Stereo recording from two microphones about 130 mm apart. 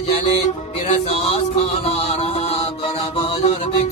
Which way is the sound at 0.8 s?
45° left (ahead or behind).